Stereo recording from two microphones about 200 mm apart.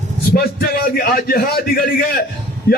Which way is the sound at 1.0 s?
50° left (ahead or behind).